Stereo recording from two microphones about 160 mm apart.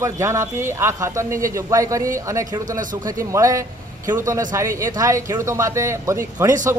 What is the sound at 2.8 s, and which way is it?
Speech, 55° right (ahead or behind).